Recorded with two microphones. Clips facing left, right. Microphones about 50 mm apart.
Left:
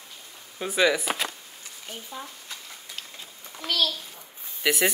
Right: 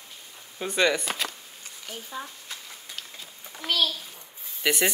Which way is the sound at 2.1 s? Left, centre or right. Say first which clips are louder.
Right 2 dB; centre.